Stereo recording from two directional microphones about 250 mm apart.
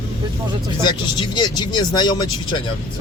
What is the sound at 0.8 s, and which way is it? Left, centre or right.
Speech, centre.